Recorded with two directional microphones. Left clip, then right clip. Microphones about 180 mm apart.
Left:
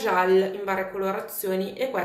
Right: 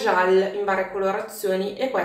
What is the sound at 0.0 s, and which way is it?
A woman's voice, 20° left (ahead or behind).